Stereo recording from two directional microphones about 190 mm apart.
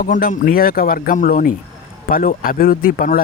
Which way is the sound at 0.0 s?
50° left (ahead or behind).